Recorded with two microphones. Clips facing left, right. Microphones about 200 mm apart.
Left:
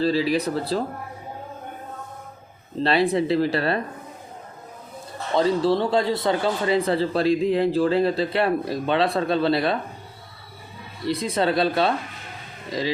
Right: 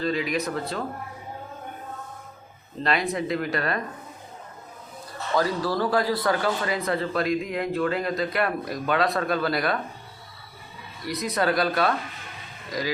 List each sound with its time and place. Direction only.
0.0 s speech: 30° left (ahead or behind)
2.8 s speech: 30° left (ahead or behind)
5.3 s speech: 25° left (ahead or behind)
11.0 s speech: 30° left (ahead or behind)